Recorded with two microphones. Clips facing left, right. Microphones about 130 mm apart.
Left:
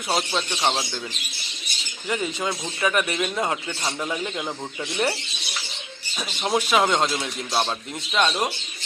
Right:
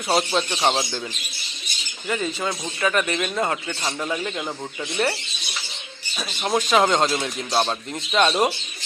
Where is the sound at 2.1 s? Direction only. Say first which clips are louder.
Right 1 dB; 15° left (ahead or behind).